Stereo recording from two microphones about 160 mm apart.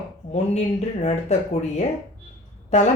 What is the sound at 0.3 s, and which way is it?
Speech, 45° left (ahead or behind).